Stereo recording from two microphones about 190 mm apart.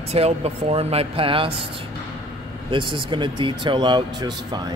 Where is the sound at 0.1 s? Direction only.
35° right (ahead or behind).